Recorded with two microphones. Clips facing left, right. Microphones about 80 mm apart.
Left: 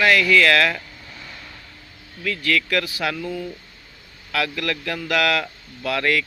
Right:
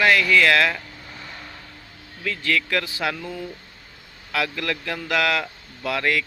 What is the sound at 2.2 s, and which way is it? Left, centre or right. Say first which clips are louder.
Speech: left 2 dB; right.